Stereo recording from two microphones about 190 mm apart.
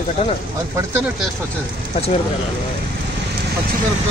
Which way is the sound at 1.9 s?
30° left (ahead or behind).